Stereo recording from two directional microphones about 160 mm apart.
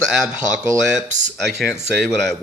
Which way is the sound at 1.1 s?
50° right (ahead or behind).